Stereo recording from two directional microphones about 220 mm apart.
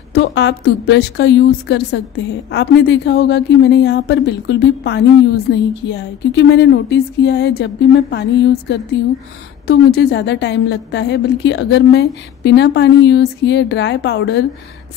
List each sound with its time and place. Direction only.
0.1 s a woman's voice: 50° left (ahead or behind)